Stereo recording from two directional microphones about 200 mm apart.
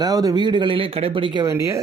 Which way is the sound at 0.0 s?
20° right (ahead or behind).